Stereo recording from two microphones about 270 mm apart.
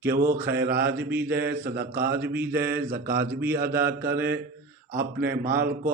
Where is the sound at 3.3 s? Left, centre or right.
Centre.